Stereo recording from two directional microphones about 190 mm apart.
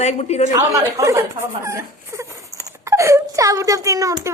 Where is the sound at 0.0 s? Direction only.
35° left (ahead or behind).